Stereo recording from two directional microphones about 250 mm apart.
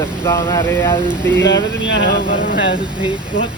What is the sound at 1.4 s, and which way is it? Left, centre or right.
Speech, left.